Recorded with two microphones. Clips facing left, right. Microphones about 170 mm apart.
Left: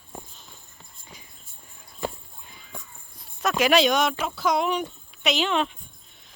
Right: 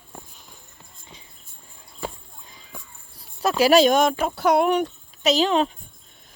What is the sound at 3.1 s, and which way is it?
Speech, 35° right (ahead or behind).